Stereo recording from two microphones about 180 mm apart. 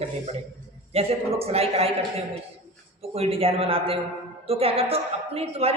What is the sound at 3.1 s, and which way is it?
A man's voice, 35° right (ahead or behind).